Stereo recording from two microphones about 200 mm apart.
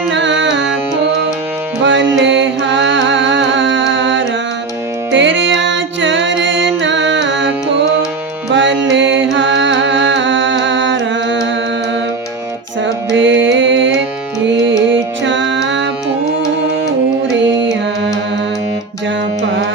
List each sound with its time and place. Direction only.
0.1 s music: 65° right (ahead or behind)
1.8 s music: 65° right (ahead or behind)
8.9 s music: 65° right (ahead or behind)
13.1 s music: 70° right (ahead or behind)
15.2 s music: 65° right (ahead or behind)
17.3 s music: 65° right (ahead or behind)